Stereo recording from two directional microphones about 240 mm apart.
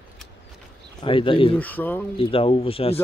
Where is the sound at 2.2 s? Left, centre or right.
Left.